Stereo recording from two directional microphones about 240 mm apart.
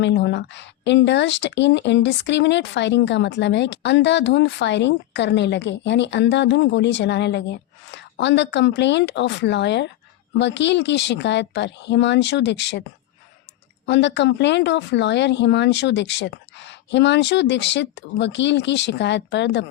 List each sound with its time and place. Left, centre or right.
0.0 s speech: left
13.8 s speech: left